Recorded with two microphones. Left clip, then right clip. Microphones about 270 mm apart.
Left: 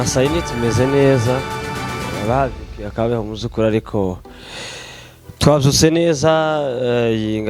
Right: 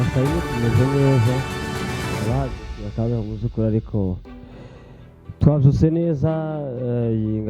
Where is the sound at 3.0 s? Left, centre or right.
Centre.